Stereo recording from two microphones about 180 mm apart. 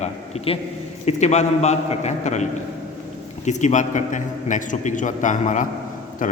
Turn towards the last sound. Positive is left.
turn(degrees=45)  # may be behind; listen again after turning